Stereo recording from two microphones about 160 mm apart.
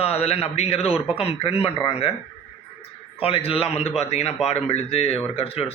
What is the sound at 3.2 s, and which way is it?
A man's voice, 35° left (ahead or behind).